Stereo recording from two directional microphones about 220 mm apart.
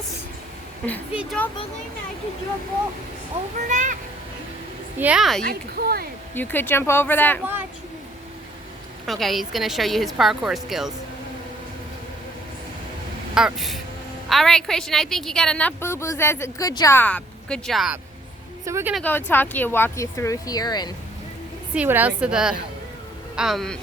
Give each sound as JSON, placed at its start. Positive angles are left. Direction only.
{"t": 1.1, "sound": "a woman's voice", "side_deg": -5}
{"t": 3.7, "sound": "a child's voice", "side_deg": -35}
{"t": 4.9, "sound": "a woman's voice", "side_deg": -5}
{"t": 5.5, "sound": "speech", "side_deg": -45}
{"t": 6.3, "sound": "speech", "side_deg": 10}
{"t": 9.0, "sound": "a woman's voice", "side_deg": 0}
{"t": 13.3, "sound": "a woman's voice", "side_deg": 0}
{"t": 18.9, "sound": "speech", "side_deg": 10}
{"t": 21.8, "sound": "a woman's voice", "side_deg": -10}